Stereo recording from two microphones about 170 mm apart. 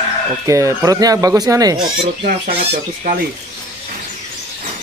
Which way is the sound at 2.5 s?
35° right (ahead or behind).